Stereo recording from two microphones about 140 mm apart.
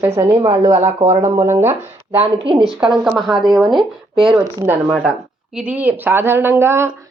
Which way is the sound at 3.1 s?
Centre (ahead or behind).